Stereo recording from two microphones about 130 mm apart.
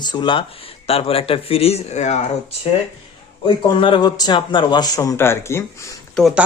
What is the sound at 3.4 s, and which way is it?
Speech, 40° left (ahead or behind).